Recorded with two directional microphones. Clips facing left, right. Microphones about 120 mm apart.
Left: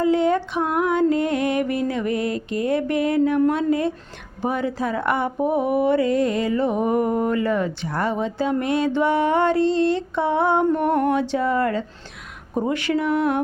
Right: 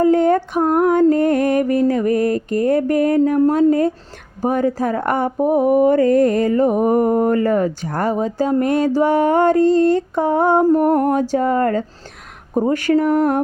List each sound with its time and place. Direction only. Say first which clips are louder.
0.0 s speech: right 5 dB; 45° right (ahead or behind)
12.5 s mantra: right 6 dB; 40° right (ahead or behind)